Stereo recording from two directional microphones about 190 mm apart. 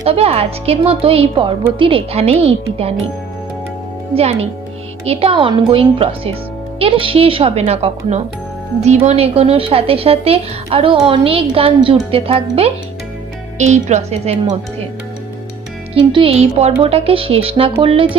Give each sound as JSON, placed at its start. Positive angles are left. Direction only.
{"t": 0.0, "sound": "speech", "side_deg": -30}
{"t": 4.1, "sound": "a woman's voice", "side_deg": -30}
{"t": 15.9, "sound": "a woman's voice", "side_deg": -30}